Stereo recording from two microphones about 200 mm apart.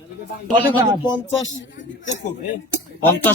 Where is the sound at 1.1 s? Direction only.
70° left (ahead or behind).